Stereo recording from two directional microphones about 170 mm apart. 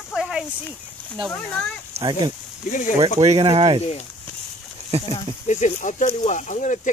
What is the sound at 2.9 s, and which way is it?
Speech, 40° right (ahead or behind).